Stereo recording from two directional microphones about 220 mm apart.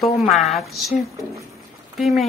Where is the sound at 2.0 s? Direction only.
Centre (ahead or behind).